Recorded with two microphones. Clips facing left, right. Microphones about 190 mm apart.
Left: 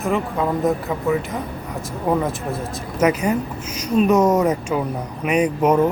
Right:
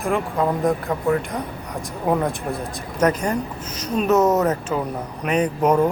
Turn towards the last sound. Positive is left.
turn(degrees=10)  # may be behind; listen again after turning